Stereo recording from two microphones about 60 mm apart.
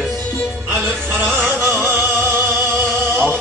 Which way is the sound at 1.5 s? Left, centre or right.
Right.